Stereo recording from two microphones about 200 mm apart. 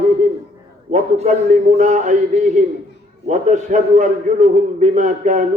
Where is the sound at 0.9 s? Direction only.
35° right (ahead or behind).